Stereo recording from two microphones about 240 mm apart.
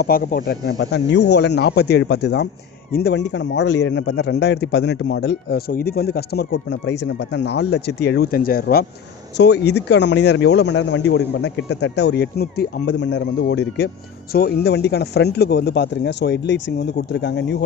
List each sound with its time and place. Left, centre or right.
0.0 s speech: left